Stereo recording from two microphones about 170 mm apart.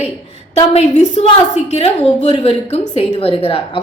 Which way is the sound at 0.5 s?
35° left (ahead or behind).